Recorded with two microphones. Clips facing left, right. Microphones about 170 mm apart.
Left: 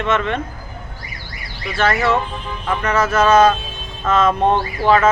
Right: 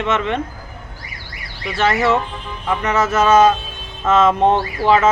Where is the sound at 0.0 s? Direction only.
20° right (ahead or behind).